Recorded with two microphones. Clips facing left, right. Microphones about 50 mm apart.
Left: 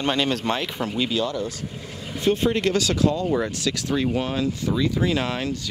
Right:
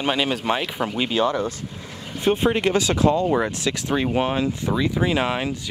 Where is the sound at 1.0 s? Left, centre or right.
Right.